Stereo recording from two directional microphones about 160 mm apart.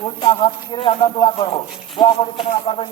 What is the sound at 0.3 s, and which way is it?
Speech, 35° left (ahead or behind).